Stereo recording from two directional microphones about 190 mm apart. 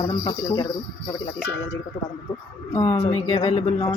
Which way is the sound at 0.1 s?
25° left (ahead or behind).